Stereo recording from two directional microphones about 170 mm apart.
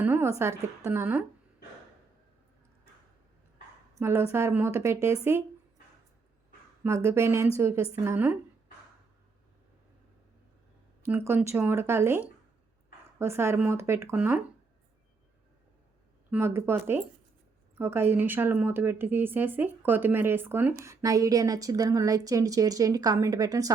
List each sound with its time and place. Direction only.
0.0 s a sound: 15° right (ahead or behind)
0.9 s a woman's voice: 10° right (ahead or behind)
4.0 s a woman's voice: 15° right (ahead or behind)
6.8 s a woman's voice: 15° right (ahead or behind)
11.0 s a woman's voice: 15° right (ahead or behind)
16.3 s a woman's voice: 15° right (ahead or behind)